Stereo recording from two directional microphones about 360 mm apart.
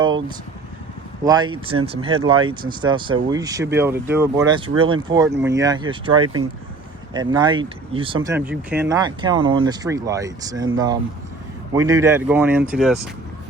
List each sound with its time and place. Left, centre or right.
0.0 s vehicle: centre
1.2 s speech: centre
6.2 s speech: right
7.1 s speech: centre